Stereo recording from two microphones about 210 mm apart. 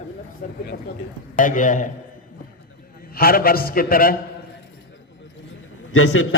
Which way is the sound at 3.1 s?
45° left (ahead or behind).